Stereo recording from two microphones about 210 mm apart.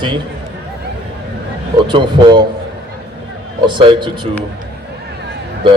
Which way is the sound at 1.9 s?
20° right (ahead or behind).